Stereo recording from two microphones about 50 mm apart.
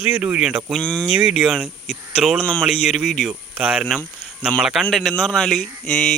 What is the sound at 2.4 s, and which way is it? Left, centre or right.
Speech, left.